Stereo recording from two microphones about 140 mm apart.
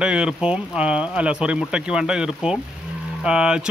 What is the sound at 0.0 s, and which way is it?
Speech, 5° right (ahead or behind).